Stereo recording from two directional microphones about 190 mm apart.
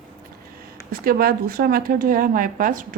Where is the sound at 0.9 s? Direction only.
50° right (ahead or behind).